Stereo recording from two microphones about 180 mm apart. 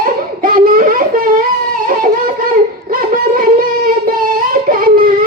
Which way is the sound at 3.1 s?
50° right (ahead or behind).